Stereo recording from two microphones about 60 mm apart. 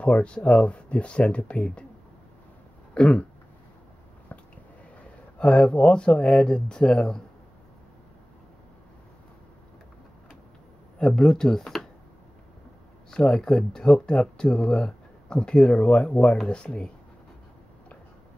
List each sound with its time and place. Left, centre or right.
0.0 s speech: left
2.9 s a sound: centre
5.4 s speech: centre
11.0 s speech: centre
13.1 s speech: centre